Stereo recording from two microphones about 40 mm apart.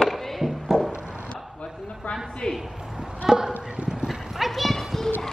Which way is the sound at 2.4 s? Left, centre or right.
Centre.